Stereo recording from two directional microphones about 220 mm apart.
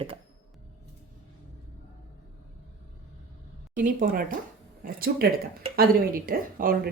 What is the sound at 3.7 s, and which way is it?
A woman's voice, 40° right (ahead or behind).